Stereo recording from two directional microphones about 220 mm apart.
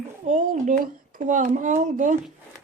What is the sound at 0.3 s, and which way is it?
Speech, 35° right (ahead or behind).